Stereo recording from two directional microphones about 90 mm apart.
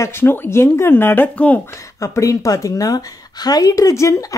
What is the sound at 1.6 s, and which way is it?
Speech, 35° left (ahead or behind).